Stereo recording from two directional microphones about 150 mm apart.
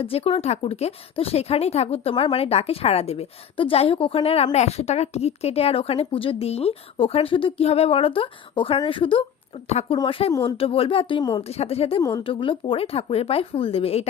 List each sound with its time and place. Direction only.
0.0 s speech: 40° left (ahead or behind)
9.6 s speech: 45° left (ahead or behind); by 11.4 s 25° left (ahead or behind)
11.4 s speech: 45° left (ahead or behind)